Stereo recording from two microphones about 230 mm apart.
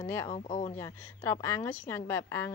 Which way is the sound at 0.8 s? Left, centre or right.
Centre.